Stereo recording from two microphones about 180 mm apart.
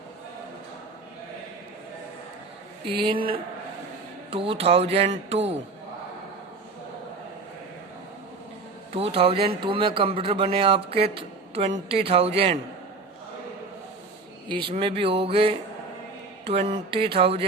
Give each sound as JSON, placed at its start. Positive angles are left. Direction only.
{"t": 2.8, "sound": "speech", "side_deg": -30}
{"t": 8.9, "sound": "speech", "side_deg": -35}
{"t": 14.4, "sound": "speech", "side_deg": -25}